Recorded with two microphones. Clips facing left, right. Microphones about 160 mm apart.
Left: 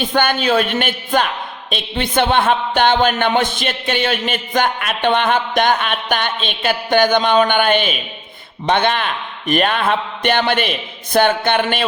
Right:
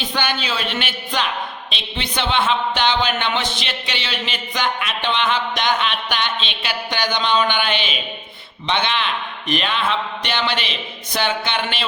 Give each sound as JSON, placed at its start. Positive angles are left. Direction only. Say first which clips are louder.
{"t": 0.0, "sound": "a man's voice", "louder": "left 7 dB", "side_deg": 50}